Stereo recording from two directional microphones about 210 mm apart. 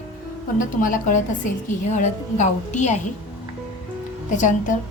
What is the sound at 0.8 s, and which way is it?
A woman's voice, 40° left (ahead or behind).